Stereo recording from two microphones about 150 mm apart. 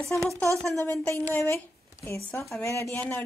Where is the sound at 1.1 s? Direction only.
15° left (ahead or behind).